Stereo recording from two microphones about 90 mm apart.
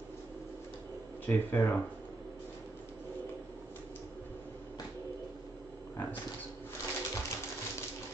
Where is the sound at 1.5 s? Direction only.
20° left (ahead or behind).